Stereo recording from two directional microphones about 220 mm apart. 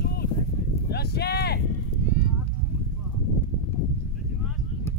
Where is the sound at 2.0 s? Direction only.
35° left (ahead or behind).